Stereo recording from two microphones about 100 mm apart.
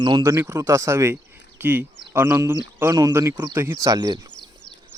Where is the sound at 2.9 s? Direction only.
40° right (ahead or behind).